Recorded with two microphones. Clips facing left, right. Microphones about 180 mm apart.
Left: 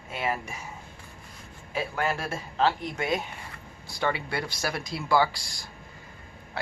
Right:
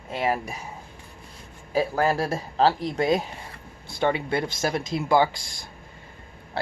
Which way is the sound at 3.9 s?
25° right (ahead or behind).